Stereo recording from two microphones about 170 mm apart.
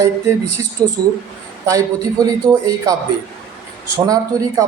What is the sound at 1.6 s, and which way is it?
Speech, 20° right (ahead or behind).